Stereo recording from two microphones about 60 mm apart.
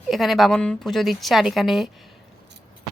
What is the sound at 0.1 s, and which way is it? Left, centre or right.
Speech, centre.